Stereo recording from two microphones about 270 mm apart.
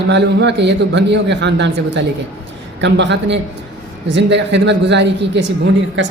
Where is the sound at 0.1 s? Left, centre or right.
Right.